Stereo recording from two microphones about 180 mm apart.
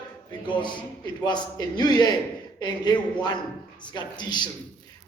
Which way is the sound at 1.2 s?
25° left (ahead or behind).